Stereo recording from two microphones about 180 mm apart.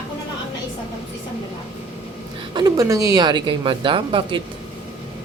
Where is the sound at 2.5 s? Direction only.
25° right (ahead or behind).